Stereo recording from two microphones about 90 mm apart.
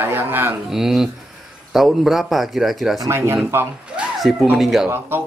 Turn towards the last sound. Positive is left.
turn(degrees=0)  # may be behind; listen again after turning